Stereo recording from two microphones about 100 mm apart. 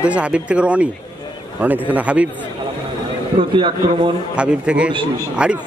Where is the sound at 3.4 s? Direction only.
55° right (ahead or behind).